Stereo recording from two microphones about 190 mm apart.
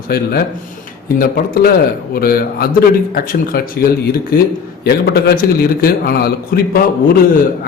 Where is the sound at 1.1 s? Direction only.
50° left (ahead or behind).